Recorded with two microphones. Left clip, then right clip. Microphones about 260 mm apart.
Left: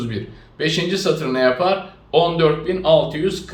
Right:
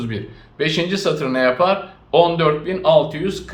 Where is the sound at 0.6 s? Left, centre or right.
Centre.